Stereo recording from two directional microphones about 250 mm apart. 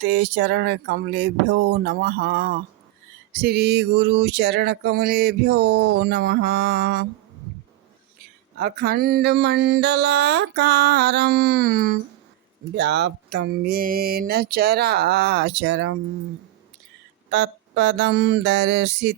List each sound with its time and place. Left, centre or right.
0.0 s music: right
8.5 s music: right
17.3 s mantra: right